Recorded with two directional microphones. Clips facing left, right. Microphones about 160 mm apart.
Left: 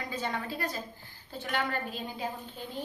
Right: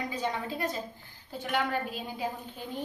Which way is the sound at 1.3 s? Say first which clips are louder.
Right 2 dB; 10° right (ahead or behind).